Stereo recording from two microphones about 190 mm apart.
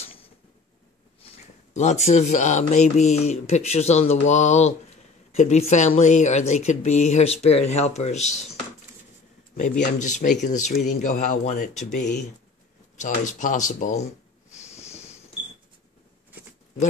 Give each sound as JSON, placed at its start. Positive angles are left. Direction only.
{"t": 1.2, "sound": "speech", "side_deg": 35}
{"t": 9.6, "sound": "speech", "side_deg": 40}